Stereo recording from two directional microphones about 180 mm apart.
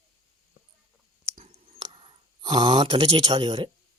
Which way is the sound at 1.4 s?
30° right (ahead or behind).